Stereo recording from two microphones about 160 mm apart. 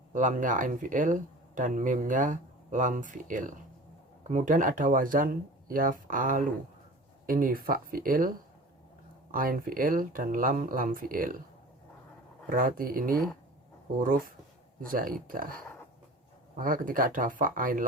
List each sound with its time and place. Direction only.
0.1 s speech: 55° right (ahead or behind)
12.5 s speech: 60° right (ahead or behind)